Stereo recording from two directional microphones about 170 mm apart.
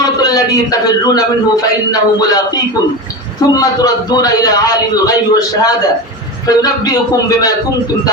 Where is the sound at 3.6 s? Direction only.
20° left (ahead or behind).